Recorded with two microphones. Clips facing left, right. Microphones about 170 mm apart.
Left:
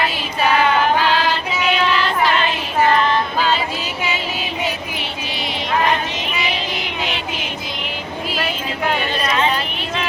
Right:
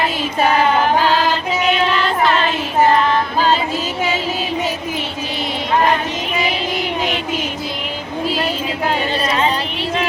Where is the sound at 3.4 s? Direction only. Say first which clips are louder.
Right 3 dB; 40° right (ahead or behind).